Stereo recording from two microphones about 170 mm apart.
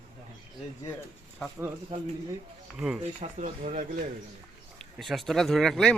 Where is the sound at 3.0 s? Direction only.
40° right (ahead or behind).